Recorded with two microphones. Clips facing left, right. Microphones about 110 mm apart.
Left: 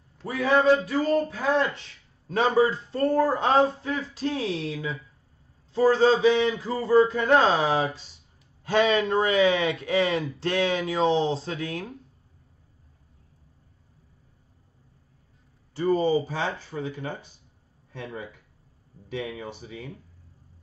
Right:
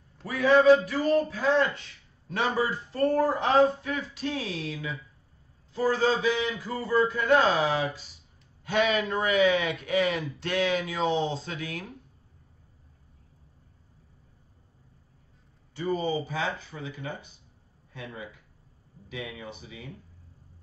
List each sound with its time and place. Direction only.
0.2 s a man's voice: 25° left (ahead or behind)
15.7 s a man's voice: 35° left (ahead or behind)